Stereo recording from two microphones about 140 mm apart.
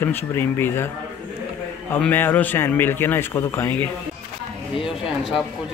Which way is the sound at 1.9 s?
15° left (ahead or behind).